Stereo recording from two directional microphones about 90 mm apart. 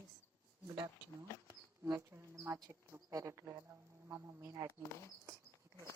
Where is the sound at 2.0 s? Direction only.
30° right (ahead or behind).